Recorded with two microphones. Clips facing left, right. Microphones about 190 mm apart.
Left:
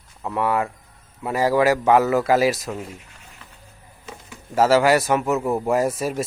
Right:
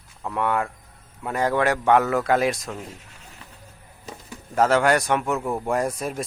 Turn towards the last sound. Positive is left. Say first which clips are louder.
# left 4 dB
turn(degrees=5)  # may be behind; listen again after turning